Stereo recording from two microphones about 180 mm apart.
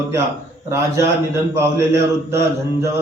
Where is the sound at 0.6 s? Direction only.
15° right (ahead or behind).